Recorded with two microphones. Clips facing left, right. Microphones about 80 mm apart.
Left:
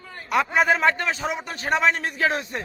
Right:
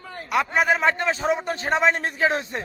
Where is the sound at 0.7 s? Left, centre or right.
Centre.